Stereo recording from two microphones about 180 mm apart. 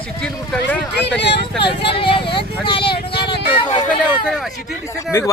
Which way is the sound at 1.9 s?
30° left (ahead or behind).